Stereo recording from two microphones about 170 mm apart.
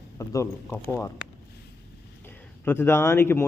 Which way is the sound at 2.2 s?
10° left (ahead or behind).